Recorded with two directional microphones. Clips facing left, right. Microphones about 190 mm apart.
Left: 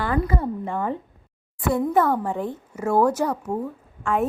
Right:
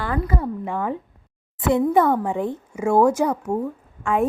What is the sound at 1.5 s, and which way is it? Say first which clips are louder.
A child's voice: right 3 dB; 20° right (ahead or behind).